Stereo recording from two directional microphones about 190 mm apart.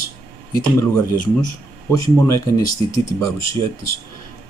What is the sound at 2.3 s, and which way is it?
Speech, 20° left (ahead or behind).